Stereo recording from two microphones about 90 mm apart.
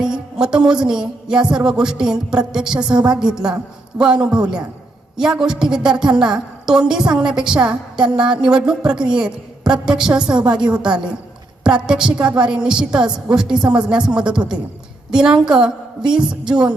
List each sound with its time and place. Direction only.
0.0 s music: 10° right (ahead or behind)
1.5 s a woman's voice: 10° right (ahead or behind)
2.9 s a woman's voice: 55° right (ahead or behind)
3.2 s a woman's voice: 10° right (ahead or behind)